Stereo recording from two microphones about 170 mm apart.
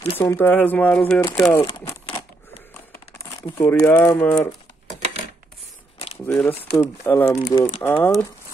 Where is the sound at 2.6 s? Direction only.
15° left (ahead or behind).